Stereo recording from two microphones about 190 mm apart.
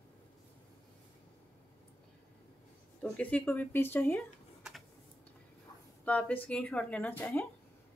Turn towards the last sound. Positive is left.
turn(degrees=10)  # may be behind; listen again after turning